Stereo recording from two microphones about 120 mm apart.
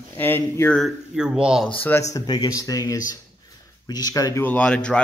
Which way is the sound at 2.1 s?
30° left (ahead or behind).